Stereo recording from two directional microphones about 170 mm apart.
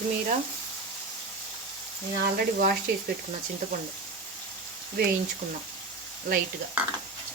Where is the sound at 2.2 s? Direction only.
60° right (ahead or behind).